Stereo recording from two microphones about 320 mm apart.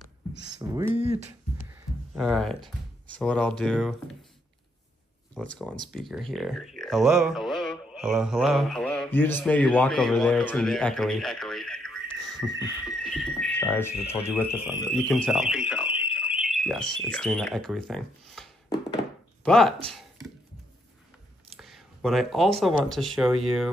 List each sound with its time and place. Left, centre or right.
0.6 s speech: centre
2.1 s speech: centre
5.3 s speech: centre
21.5 s speech: centre